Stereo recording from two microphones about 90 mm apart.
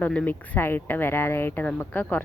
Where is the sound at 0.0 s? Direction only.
15° left (ahead or behind).